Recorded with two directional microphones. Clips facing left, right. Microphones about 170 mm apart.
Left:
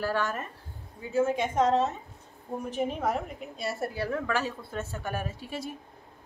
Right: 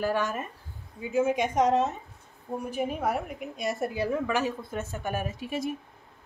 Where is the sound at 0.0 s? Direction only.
15° right (ahead or behind).